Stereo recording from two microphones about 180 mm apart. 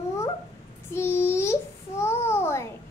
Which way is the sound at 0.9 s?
15° left (ahead or behind).